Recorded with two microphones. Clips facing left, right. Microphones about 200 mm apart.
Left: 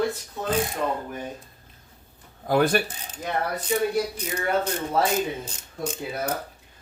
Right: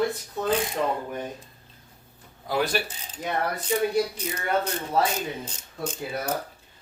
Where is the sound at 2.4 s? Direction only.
50° left (ahead or behind).